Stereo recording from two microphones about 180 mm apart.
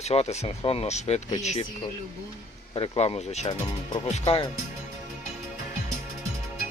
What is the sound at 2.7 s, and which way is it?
Speech, 30° left (ahead or behind).